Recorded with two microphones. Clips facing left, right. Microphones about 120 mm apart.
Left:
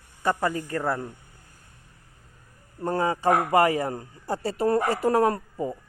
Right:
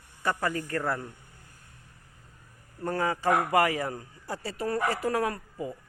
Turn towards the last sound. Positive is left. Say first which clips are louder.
# left 7 dB
turn(degrees=35)  # may be behind; listen again after turning